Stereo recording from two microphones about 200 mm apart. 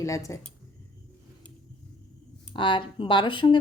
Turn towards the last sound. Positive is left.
turn(degrees=25)  # may be behind; listen again after turning